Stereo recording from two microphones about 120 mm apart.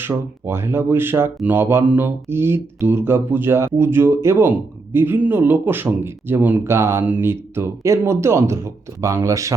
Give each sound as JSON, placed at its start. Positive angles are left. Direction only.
{"t": 0.0, "sound": "mantra", "side_deg": -20}